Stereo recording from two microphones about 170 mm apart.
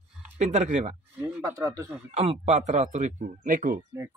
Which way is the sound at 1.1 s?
15° right (ahead or behind).